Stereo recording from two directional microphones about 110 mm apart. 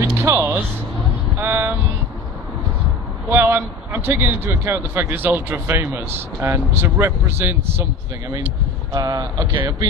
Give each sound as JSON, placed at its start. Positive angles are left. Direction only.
{"t": 0.0, "sound": "music", "side_deg": -25}
{"t": 1.4, "sound": "speech", "side_deg": -20}
{"t": 3.3, "sound": "speech", "side_deg": -20}
{"t": 8.9, "sound": "speech", "side_deg": -35}